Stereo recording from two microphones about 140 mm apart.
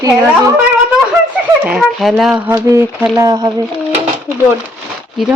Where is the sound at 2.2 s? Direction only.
5° right (ahead or behind).